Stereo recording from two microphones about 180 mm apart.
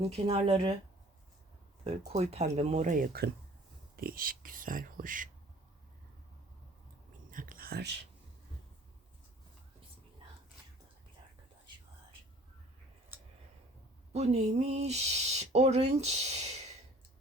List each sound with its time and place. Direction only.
0.0 s speech: 35° right (ahead or behind)
1.8 s speech: 35° right (ahead or behind)
7.3 s a sound: 50° right (ahead or behind); by 8.0 s 65° right (ahead or behind)
14.1 s speech: 35° right (ahead or behind)